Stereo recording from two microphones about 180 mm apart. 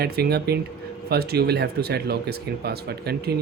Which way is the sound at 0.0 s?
60° right (ahead or behind).